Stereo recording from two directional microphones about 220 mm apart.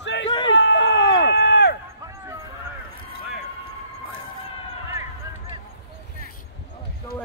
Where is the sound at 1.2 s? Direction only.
50° left (ahead or behind).